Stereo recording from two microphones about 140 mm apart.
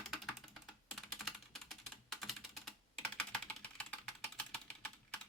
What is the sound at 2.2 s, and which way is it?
Computer keyboard, centre (ahead or behind).